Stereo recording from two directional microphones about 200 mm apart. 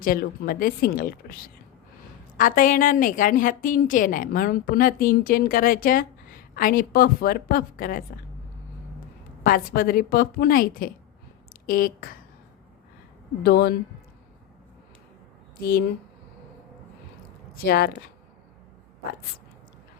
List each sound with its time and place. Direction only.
0.0 s a woman's voice: 45° left (ahead or behind)
9.4 s a woman's voice: 45° left (ahead or behind)
13.4 s a woman's voice: 55° left (ahead or behind)
17.5 s speech: 50° left (ahead or behind)